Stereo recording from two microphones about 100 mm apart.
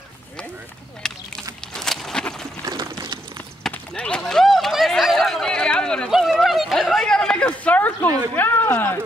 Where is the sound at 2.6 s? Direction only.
45° right (ahead or behind).